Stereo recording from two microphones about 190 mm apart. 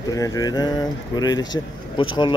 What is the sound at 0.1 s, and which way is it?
Speech, 20° left (ahead or behind).